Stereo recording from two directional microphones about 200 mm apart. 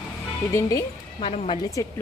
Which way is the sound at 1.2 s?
30° left (ahead or behind).